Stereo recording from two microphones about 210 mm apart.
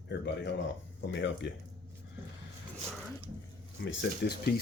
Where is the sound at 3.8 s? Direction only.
55° left (ahead or behind).